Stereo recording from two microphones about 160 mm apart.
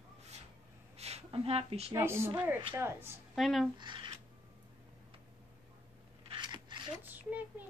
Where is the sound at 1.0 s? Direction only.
40° right (ahead or behind).